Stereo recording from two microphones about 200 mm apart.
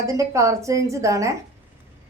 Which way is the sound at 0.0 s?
15° right (ahead or behind).